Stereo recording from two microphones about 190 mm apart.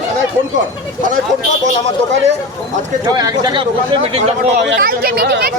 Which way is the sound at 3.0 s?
20° right (ahead or behind).